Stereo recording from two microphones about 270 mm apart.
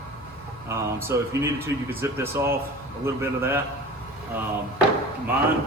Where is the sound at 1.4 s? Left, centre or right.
Centre.